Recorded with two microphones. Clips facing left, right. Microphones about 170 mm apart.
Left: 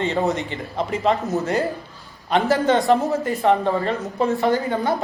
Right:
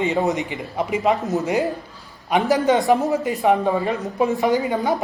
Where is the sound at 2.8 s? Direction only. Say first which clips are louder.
Even; 15° right (ahead or behind).